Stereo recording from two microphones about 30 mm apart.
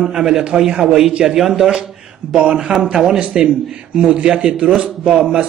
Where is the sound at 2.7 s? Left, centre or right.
Right.